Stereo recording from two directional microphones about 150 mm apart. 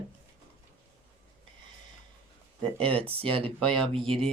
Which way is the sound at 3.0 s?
40° right (ahead or behind).